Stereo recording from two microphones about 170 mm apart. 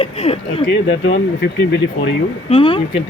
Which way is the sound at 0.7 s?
90° left.